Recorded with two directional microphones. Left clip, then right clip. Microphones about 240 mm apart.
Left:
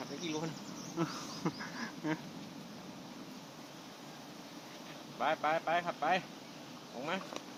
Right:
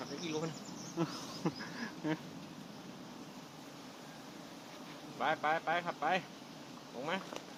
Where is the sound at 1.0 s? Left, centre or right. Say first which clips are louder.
Left 1 dB; centre.